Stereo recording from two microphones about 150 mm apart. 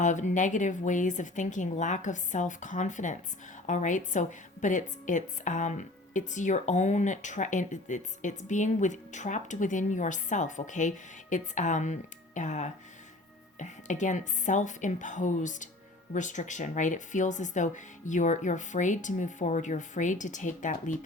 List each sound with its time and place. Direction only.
0.0 s a woman's voice: 55° left (ahead or behind)